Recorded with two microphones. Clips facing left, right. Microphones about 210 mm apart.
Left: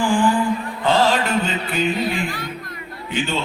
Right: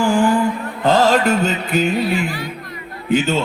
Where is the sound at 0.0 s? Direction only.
45° right (ahead or behind).